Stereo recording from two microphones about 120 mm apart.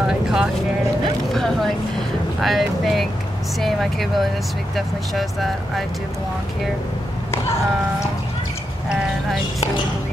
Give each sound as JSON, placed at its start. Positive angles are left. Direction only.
{"t": 0.0, "sound": "vehicle", "side_deg": -5}
{"t": 1.3, "sound": "a sound", "side_deg": 5}
{"t": 2.4, "sound": "speech", "side_deg": 0}